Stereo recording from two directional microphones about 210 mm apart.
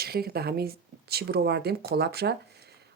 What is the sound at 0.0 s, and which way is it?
Speech, 45° right (ahead or behind).